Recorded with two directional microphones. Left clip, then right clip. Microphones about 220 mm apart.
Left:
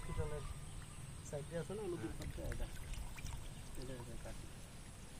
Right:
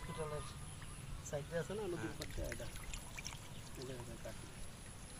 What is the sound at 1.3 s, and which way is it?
Speech, centre (ahead or behind).